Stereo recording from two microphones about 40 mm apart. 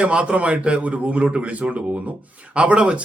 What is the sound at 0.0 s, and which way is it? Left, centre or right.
A man's voice, right.